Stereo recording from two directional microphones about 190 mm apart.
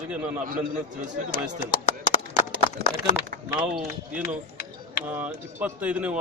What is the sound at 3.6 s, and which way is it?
A man's voice, 5° right (ahead or behind).